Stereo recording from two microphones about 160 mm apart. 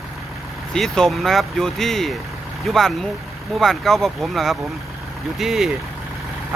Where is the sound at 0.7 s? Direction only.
5° left (ahead or behind).